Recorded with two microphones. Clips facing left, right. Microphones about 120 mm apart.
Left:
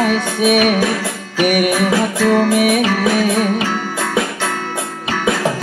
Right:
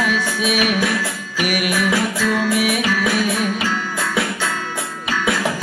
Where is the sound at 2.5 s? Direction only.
40° left (ahead or behind).